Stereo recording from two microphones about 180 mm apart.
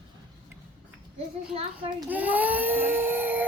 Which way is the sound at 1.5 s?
35° right (ahead or behind).